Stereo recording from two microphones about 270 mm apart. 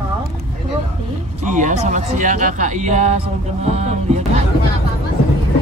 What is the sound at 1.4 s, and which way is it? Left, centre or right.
Speech, right.